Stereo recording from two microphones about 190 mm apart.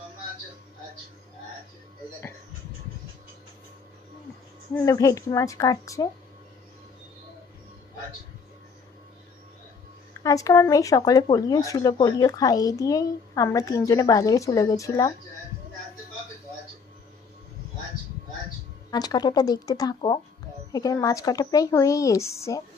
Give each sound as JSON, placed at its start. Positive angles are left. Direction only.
{"t": 4.7, "sound": "speech", "side_deg": 15}
{"t": 10.2, "sound": "speech", "side_deg": 15}
{"t": 18.9, "sound": "speech", "side_deg": 20}